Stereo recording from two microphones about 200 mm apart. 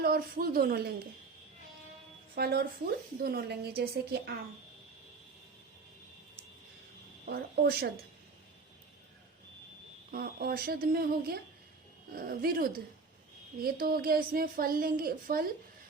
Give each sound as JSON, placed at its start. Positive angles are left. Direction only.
{"t": 0.0, "sound": "a woman's voice", "side_deg": -50}
{"t": 2.3, "sound": "a woman's voice", "side_deg": -50}
{"t": 7.3, "sound": "a woman's voice", "side_deg": -50}
{"t": 10.1, "sound": "a woman's voice", "side_deg": -50}